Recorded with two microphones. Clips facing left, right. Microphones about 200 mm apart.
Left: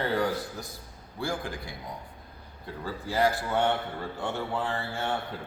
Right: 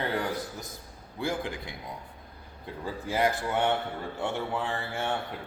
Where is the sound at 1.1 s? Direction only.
20° right (ahead or behind).